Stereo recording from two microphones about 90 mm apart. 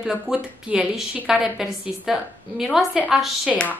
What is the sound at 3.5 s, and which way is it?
Speech, 15° left (ahead or behind).